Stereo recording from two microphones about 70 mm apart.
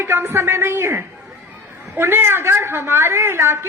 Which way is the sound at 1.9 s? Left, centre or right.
Right.